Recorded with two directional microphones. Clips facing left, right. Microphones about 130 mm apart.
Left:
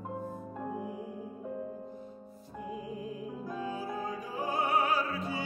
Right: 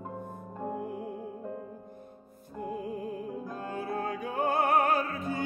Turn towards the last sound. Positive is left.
turn(degrees=-50)  # may be behind; listen again after turning